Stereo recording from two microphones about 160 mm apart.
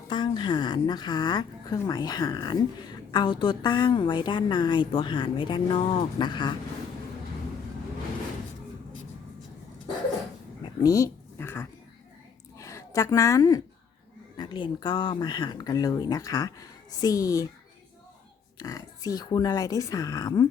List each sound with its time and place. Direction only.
0.1 s speech: 30° left (ahead or behind)
10.6 s a sound: 20° left (ahead or behind)
14.3 s speech: 30° left (ahead or behind)
18.6 s speech: 25° left (ahead or behind)